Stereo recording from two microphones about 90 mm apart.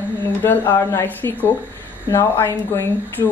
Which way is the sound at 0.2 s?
25° left (ahead or behind).